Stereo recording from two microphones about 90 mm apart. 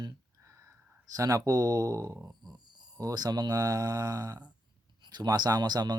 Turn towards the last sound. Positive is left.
turn(degrees=-50)  # may be behind; listen again after turning